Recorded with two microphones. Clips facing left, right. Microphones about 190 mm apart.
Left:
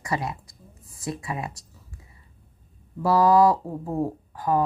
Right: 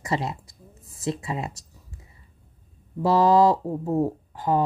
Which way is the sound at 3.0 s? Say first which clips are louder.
Even; 25° right (ahead or behind).